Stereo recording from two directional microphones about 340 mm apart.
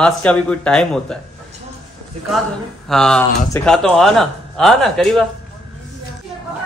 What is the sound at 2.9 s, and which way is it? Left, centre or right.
Snicker, centre.